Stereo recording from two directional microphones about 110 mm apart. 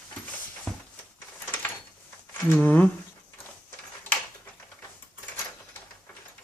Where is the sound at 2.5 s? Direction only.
15° left (ahead or behind).